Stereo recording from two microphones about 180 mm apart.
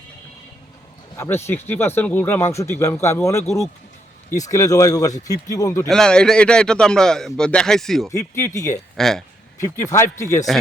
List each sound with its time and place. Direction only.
1.1 s speech: 15° left (ahead or behind)
4.3 s speech: 20° left (ahead or behind)
5.9 s a man's voice: 5° left (ahead or behind)
8.1 s speech: 15° left (ahead or behind)
9.0 s a man's voice: centre (ahead or behind)
9.6 s speech: 15° left (ahead or behind)